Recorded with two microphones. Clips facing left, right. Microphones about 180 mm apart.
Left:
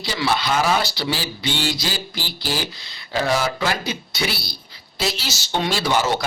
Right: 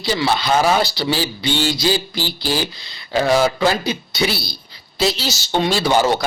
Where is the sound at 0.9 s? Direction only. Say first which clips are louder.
Right 5 dB; 30° right (ahead or behind).